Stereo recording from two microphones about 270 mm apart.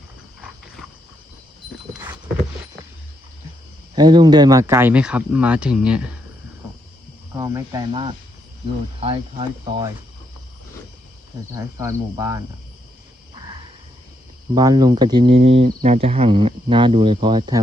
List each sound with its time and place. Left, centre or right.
3.9 s speech: centre
7.3 s speech: centre
11.5 s speech: centre
14.5 s speech: centre